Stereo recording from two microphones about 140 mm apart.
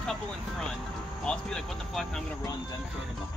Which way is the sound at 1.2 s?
5° left (ahead or behind).